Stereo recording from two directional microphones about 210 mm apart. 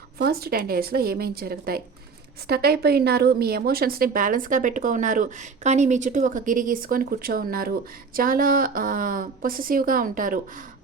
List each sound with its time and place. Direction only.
0.2 s a woman's voice: 45° right (ahead or behind)